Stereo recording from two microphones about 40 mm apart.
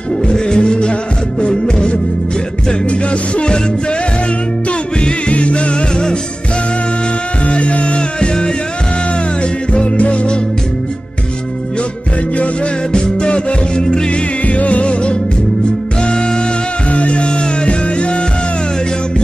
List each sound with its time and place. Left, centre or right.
0.3 s music: left
5.0 s music: left
7.4 s music: left
9.7 s music: left
12.9 s music: left
14.4 s music: left
16.0 s music: centre
16.9 s music: left